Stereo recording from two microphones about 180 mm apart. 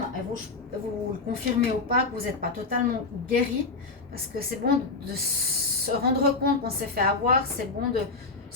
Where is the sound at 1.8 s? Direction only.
55° right (ahead or behind).